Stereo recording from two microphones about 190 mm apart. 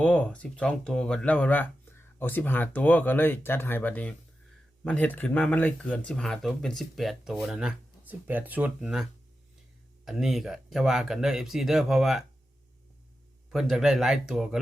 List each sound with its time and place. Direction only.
0.0 s speech: 5° left (ahead or behind)
10.1 s speech: centre (ahead or behind)
13.5 s speech: centre (ahead or behind)